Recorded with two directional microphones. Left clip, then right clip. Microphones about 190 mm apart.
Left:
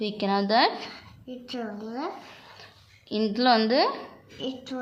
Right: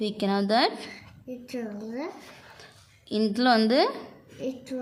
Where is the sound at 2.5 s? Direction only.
25° right (ahead or behind).